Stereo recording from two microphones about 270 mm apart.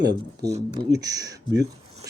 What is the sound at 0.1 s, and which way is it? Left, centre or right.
Speech, centre.